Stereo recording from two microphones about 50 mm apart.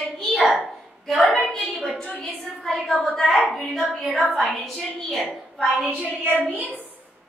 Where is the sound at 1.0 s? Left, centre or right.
Centre.